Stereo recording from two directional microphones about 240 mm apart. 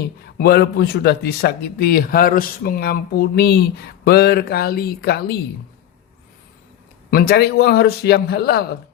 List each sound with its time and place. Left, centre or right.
0.3 s speech: left
7.1 s speech: left